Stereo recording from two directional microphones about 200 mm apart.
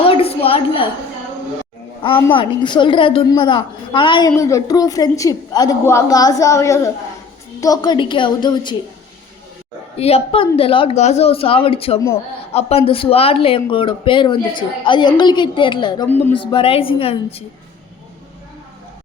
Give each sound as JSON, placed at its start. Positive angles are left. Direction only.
{"t": 0.0, "sound": "a sound", "side_deg": 30}
{"t": 2.3, "sound": "a woman's voice", "side_deg": 25}
{"t": 10.0, "sound": "speech", "side_deg": 30}
{"t": 16.0, "sound": "a woman's voice", "side_deg": 10}
{"t": 16.4, "sound": "speech", "side_deg": 25}